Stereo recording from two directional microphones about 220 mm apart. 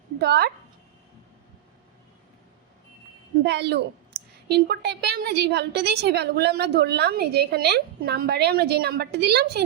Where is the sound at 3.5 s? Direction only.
50° right (ahead or behind).